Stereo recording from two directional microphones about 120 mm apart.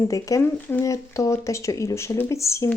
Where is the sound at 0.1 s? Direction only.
25° left (ahead or behind).